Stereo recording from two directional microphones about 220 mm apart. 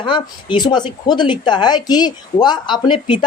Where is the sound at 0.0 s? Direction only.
20° left (ahead or behind).